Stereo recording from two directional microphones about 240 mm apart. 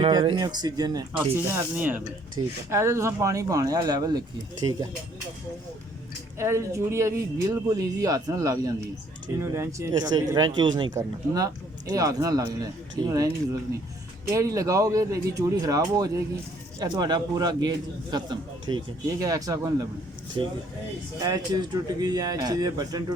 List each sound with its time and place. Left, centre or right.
0.0 s speech: centre
6.4 s speech: centre